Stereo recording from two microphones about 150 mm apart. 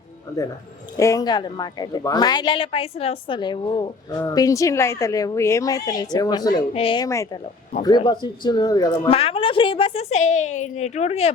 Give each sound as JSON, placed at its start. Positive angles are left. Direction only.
{"t": 0.9, "sound": "speech", "side_deg": 20}
{"t": 6.7, "sound": "speech", "side_deg": 35}
{"t": 7.0, "sound": "speech", "side_deg": 20}
{"t": 9.0, "sound": "a woman's voice", "side_deg": 40}